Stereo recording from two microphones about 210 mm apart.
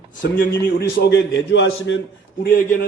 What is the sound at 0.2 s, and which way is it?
A man's voice, 45° left (ahead or behind).